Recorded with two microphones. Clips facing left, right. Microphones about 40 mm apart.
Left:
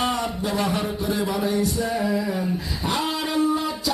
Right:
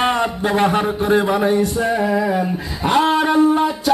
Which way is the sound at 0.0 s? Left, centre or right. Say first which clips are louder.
Right 7 dB; right.